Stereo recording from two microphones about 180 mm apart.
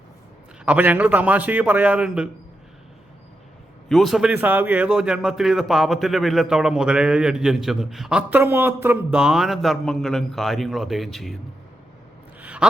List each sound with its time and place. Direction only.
0.6 s a man's voice: 10° right (ahead or behind)
3.8 s a man's voice: centre (ahead or behind)
12.4 s a sound: 10° right (ahead or behind)